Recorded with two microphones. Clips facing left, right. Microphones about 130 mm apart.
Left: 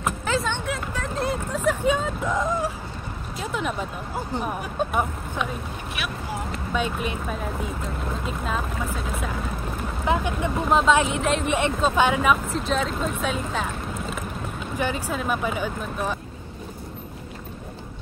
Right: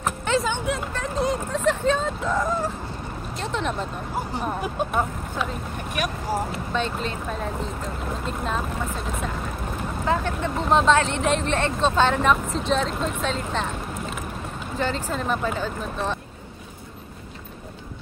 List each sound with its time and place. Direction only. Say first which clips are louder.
0.2 s vehicle: right 2 dB; centre (ahead or behind); by 2.7 s 15° left (ahead or behind)
3.3 s speech: even; 5° left (ahead or behind)
5.9 s speech: right 6 dB; 40° right (ahead or behind)
6.7 s speech: left 2 dB; 10° left (ahead or behind)
10.0 s speech: left 1 dB; 15° left (ahead or behind)
14.8 s speech: right 1 dB; 10° left (ahead or behind)